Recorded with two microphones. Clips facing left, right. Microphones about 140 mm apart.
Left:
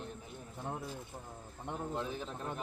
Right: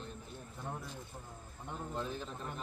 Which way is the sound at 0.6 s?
25° left (ahead or behind).